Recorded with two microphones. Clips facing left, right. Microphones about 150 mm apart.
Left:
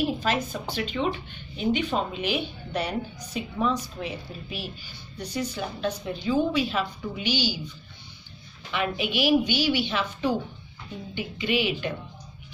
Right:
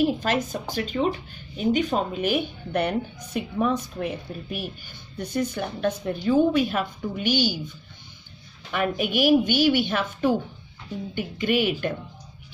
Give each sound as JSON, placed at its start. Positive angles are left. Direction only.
{"t": 0.2, "sound": "speech", "side_deg": -50}
{"t": 8.7, "sound": "speech", "side_deg": -50}